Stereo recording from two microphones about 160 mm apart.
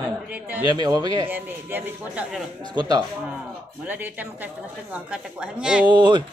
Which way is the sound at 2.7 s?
25° right (ahead or behind).